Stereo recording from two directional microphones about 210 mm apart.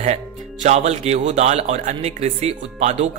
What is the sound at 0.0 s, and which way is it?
Speech, 35° right (ahead or behind).